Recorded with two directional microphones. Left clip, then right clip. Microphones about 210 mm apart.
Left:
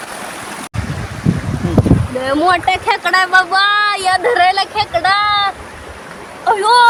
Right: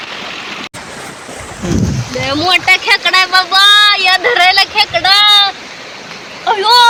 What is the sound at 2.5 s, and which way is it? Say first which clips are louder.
Speech: right 6 dB; 15° left (ahead or behind).